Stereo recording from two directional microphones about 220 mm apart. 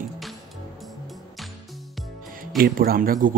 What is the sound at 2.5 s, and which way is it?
Speech, 40° right (ahead or behind).